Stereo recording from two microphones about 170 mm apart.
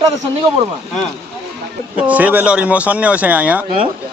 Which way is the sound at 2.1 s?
10° right (ahead or behind).